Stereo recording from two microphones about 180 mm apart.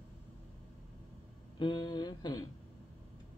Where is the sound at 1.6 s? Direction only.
25° left (ahead or behind).